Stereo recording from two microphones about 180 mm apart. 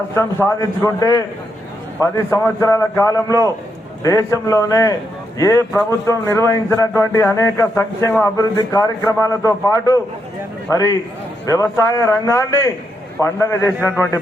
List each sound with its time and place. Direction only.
0.2 s a man's voice: 15° left (ahead or behind)